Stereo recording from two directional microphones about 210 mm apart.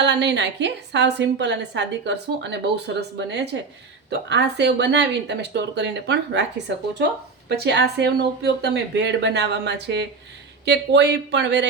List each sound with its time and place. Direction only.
0.0 s a woman's voice: 55° right (ahead or behind)